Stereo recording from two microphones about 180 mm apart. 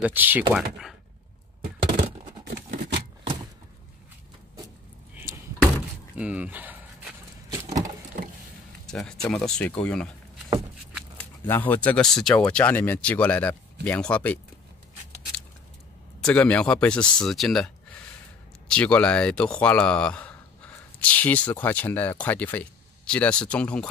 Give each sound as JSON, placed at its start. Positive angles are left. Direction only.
{"t": 0.0, "sound": "speech", "side_deg": -10}
{"t": 2.5, "sound": "scissors", "side_deg": -55}
{"t": 5.1, "sound": "a sound", "side_deg": -10}
{"t": 8.8, "sound": "a sound", "side_deg": 5}
{"t": 9.4, "sound": "speech", "side_deg": 5}
{"t": 11.1, "sound": "speech", "side_deg": 10}
{"t": 16.2, "sound": "speech", "side_deg": 5}
{"t": 18.7, "sound": "speech", "side_deg": 5}